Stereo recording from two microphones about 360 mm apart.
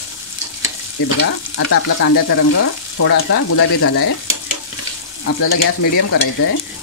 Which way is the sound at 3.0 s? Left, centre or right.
Left.